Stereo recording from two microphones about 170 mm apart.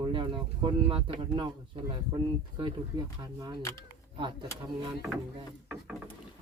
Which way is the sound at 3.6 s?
20° left (ahead or behind).